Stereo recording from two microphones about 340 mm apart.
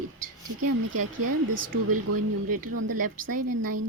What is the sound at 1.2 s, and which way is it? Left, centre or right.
Speech, right.